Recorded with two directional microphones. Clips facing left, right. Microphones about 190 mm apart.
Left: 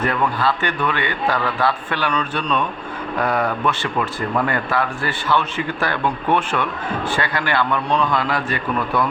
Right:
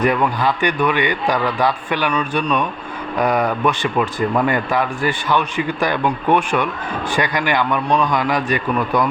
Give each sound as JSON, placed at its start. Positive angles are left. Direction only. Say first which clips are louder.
{"t": 0.0, "sound": "speech", "louder": "right 3 dB", "side_deg": -15}